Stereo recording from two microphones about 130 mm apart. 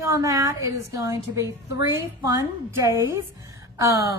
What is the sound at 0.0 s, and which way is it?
A woman's voice, 25° right (ahead or behind).